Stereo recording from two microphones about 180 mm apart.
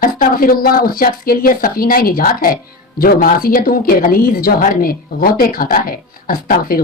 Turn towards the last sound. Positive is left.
turn(degrees=55)  # may be behind; listen again after turning